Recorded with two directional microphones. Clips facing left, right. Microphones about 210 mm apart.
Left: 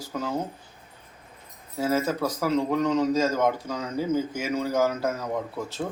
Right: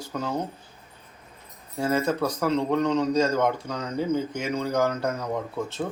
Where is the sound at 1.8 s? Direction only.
5° left (ahead or behind).